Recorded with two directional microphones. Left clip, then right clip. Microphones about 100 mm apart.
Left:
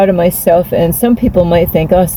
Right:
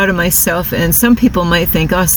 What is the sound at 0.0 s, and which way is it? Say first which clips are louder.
Speech: left 4 dB; 25° left (ahead or behind).